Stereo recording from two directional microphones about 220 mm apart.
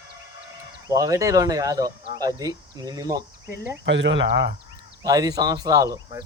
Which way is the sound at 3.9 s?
55° right (ahead or behind).